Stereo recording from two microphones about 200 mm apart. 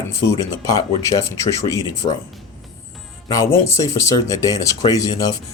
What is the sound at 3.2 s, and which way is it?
Speech, 15° left (ahead or behind).